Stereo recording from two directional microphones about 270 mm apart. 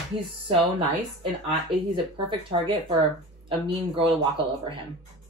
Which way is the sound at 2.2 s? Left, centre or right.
Centre.